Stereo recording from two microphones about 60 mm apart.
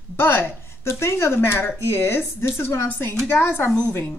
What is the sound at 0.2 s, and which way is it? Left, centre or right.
A woman's voice, left.